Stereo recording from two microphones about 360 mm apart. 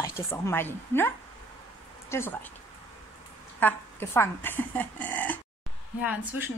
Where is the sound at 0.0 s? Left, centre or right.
Centre.